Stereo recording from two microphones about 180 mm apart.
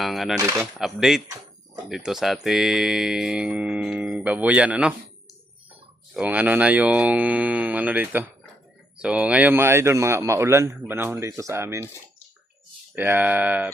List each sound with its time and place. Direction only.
0.0 s speech: centre (ahead or behind)
6.1 s speech: 10° right (ahead or behind)
13.0 s speech: 10° right (ahead or behind)